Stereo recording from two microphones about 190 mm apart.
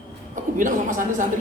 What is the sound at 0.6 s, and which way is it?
Speech, 45° right (ahead or behind).